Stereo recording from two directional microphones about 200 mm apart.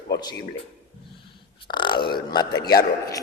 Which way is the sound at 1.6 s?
25° left (ahead or behind).